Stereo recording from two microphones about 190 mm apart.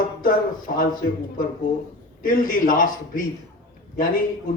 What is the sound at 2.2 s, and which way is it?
A man's voice, 45° left (ahead or behind).